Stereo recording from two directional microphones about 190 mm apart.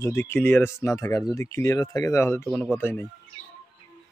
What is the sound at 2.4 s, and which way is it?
Speech, centre (ahead or behind).